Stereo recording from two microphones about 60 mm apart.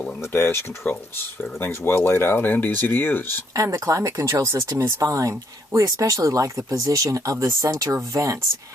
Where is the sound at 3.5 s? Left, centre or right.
Right.